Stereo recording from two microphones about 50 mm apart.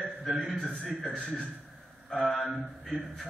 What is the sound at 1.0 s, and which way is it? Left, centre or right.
Speech, centre.